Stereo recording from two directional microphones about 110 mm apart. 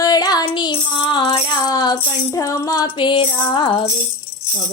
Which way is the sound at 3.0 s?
45° left (ahead or behind).